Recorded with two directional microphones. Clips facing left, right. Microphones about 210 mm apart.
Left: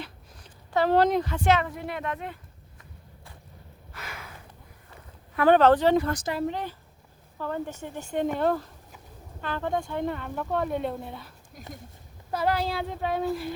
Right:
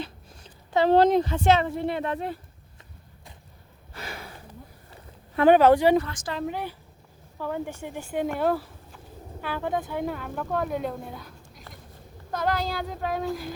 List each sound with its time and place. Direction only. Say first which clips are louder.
0.7 s speech: right 3 dB; 25° right (ahead or behind)
3.9 s a sound: right 4 dB; 30° right (ahead or behind)
5.5 s speech: right 2 dB; 10° right (ahead or behind)